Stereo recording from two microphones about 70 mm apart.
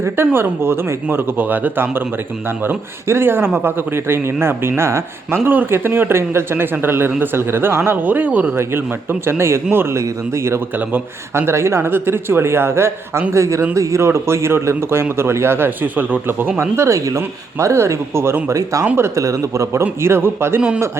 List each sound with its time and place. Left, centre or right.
0.3 s speech: right
5.5 s speech: right
8.5 s a man's voice: right
18.4 s a man's voice: right
20.0 s speech: right